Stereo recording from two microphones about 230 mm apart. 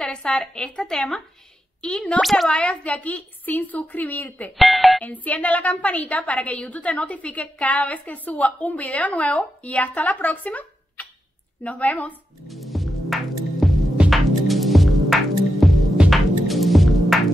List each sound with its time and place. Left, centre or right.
0.0 s a woman's voice: centre
12.1 s music: centre
15.6 s throbbing: centre